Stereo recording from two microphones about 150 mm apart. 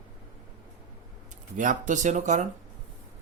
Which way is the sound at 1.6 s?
55° right (ahead or behind).